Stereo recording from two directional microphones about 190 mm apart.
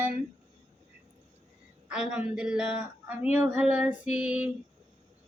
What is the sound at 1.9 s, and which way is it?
Female singing, 5° right (ahead or behind).